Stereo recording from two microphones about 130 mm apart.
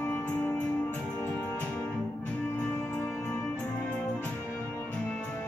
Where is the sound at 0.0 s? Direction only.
15° left (ahead or behind).